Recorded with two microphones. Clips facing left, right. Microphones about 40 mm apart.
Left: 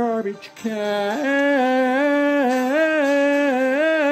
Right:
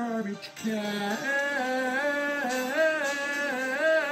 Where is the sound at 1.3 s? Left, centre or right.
Left.